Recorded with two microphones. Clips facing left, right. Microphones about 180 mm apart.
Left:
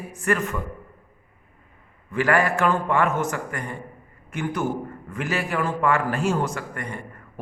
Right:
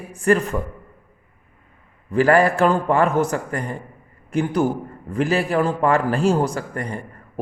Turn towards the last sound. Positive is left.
turn(degrees=-35)  # may be behind; listen again after turning